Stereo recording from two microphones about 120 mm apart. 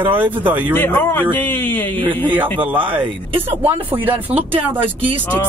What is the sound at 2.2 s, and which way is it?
Speech, 15° right (ahead or behind).